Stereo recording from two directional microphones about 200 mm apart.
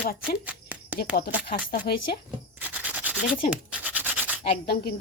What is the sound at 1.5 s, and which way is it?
Speech, 50° left (ahead or behind).